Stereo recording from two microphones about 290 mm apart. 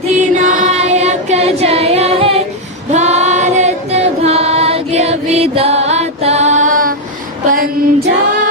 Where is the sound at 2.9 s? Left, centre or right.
Right.